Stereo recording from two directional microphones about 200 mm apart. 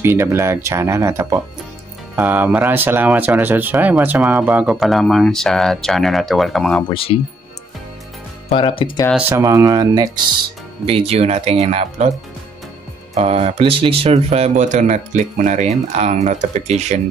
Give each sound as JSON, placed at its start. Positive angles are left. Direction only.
{"t": 0.0, "sound": "speech", "side_deg": -10}
{"t": 6.9, "sound": "speech", "side_deg": 25}
{"t": 8.5, "sound": "speech", "side_deg": 25}
{"t": 9.3, "sound": "speech", "side_deg": -15}
{"t": 10.9, "sound": "speech", "side_deg": -30}
{"t": 13.1, "sound": "speech", "side_deg": -30}